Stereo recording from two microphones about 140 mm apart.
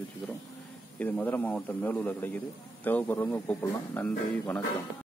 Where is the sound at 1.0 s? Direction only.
10° left (ahead or behind).